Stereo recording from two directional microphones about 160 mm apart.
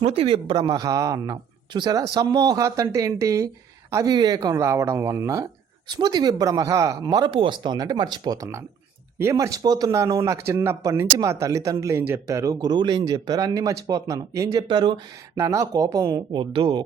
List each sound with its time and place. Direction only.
0.0 s speech: 40° right (ahead or behind); by 14.6 s 20° right (ahead or behind)
14.7 s speech: 30° right (ahead or behind)
15.4 s speech: 20° right (ahead or behind)